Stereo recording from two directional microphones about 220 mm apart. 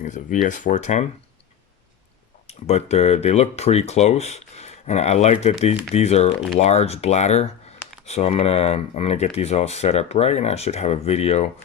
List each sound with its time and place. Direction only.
0.0 s speech: 35° left (ahead or behind)
2.5 s speech: 30° left (ahead or behind)